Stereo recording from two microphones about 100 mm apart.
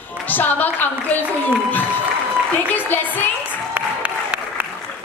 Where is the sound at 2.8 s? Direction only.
20° left (ahead or behind).